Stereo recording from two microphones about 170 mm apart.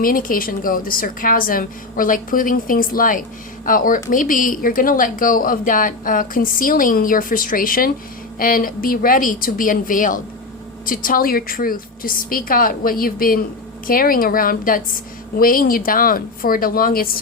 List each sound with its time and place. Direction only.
0.0 s a woman's voice: 55° left (ahead or behind)